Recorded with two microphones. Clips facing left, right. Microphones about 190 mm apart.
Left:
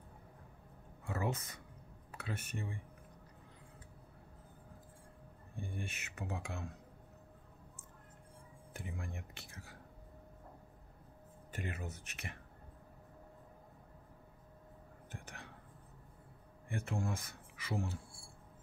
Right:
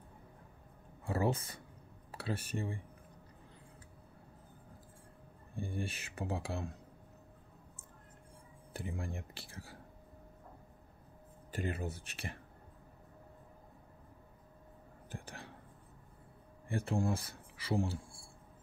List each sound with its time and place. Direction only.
1.0 s speech: 35° right (ahead or behind)
5.6 s speech: 30° right (ahead or behind)
8.7 s speech: 30° right (ahead or behind)
11.5 s speech: 30° right (ahead or behind)
15.0 s a sound: 30° right (ahead or behind)
16.6 s speech: 35° right (ahead or behind)